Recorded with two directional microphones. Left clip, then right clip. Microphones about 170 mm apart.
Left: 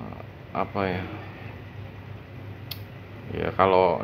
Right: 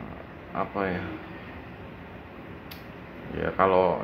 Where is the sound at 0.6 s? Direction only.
35° left (ahead or behind).